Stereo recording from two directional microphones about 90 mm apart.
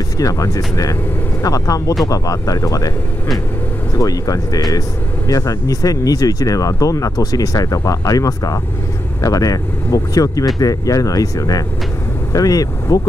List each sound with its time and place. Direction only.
1.4 s speech: 40° left (ahead or behind)
3.9 s speech: 40° left (ahead or behind)